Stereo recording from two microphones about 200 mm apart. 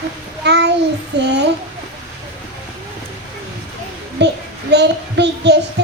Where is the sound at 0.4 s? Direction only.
60° right (ahead or behind).